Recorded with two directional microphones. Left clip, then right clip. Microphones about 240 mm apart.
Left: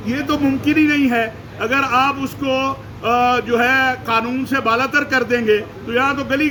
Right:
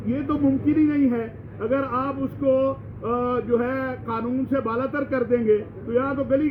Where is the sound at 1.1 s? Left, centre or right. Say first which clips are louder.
Left 9 dB; left.